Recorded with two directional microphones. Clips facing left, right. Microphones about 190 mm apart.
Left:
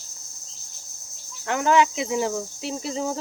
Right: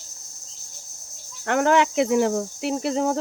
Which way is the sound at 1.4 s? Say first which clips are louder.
Right 1 dB; 55° right (ahead or behind).